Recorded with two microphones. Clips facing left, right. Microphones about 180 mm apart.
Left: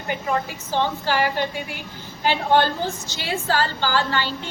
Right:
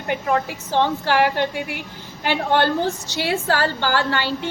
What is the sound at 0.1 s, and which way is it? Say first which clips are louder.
A woman's voice: right 3 dB; 65° right (ahead or behind).